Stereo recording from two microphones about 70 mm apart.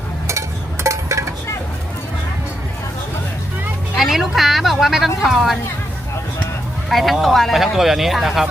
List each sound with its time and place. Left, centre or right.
0.9 s a sound: right
3.9 s music: centre
6.9 s speech: centre